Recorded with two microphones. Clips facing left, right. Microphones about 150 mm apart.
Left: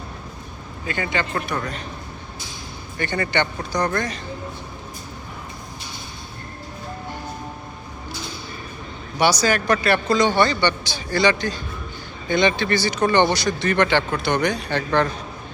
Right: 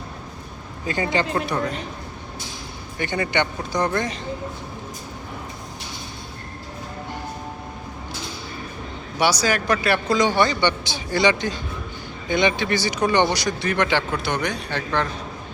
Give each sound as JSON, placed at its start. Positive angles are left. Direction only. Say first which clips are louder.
{"t": 0.9, "sound": "a man's voice", "louder": "right 3 dB", "side_deg": -35}
{"t": 3.0, "sound": "speech", "louder": "even", "side_deg": -15}
{"t": 9.1, "sound": "speech", "louder": "left 2 dB", "side_deg": -5}